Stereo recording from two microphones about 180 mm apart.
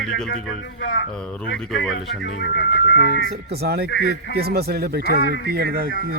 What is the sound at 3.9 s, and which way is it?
Speech, 70° left (ahead or behind).